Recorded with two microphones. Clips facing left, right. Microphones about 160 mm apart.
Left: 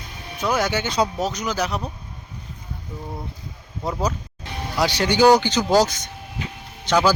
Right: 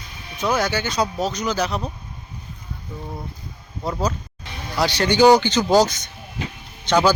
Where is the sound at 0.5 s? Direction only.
20° left (ahead or behind).